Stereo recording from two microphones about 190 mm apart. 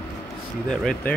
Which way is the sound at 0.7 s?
Centre (ahead or behind).